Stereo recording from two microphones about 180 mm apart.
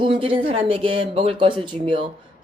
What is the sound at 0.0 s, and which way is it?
A woman's voice, 30° right (ahead or behind).